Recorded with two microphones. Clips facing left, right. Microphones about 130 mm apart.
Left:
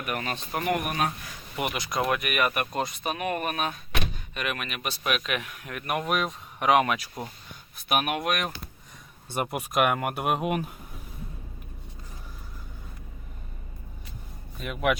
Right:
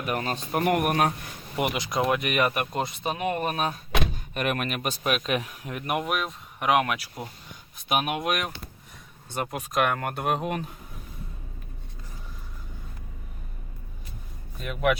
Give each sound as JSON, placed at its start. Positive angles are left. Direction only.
{"t": 0.0, "sound": "speech", "side_deg": -30}
{"t": 0.6, "sound": "speech", "side_deg": -60}
{"t": 1.5, "sound": "speech", "side_deg": -25}
{"t": 4.4, "sound": "speech", "side_deg": -45}
{"t": 6.1, "sound": "speech", "side_deg": 0}
{"t": 7.9, "sound": "speech", "side_deg": -20}
{"t": 9.3, "sound": "speech", "side_deg": 10}
{"t": 14.6, "sound": "speech", "side_deg": 0}